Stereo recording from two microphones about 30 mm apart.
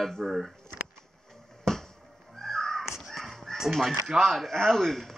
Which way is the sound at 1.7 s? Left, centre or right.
Centre.